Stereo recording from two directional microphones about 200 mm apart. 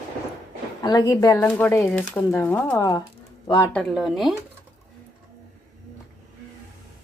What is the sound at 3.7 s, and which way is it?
Speech, 5° left (ahead or behind).